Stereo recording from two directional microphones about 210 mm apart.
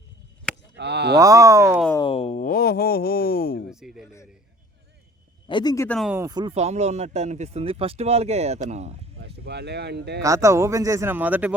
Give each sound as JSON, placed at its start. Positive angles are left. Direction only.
{"t": 0.8, "sound": "speech", "side_deg": -55}
{"t": 1.2, "sound": "speech", "side_deg": -15}
{"t": 2.0, "sound": "a sound", "side_deg": 25}
{"t": 3.7, "sound": "speech", "side_deg": -5}
{"t": 5.5, "sound": "speech", "side_deg": 20}
{"t": 6.0, "sound": "speech", "side_deg": -10}
{"t": 9.2, "sound": "speech", "side_deg": -55}
{"t": 10.2, "sound": "speech", "side_deg": -15}